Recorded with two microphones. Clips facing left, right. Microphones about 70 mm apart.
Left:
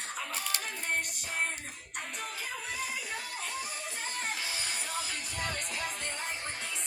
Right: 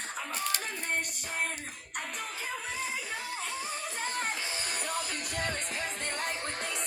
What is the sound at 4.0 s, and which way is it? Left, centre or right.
Music, right.